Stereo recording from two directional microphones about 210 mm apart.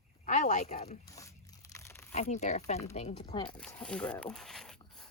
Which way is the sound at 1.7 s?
15° left (ahead or behind).